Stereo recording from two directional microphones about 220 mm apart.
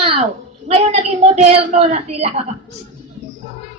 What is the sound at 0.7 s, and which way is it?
Speech, 40° right (ahead or behind).